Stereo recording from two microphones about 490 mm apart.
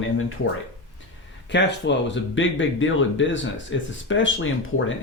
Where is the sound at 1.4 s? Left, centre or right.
Left.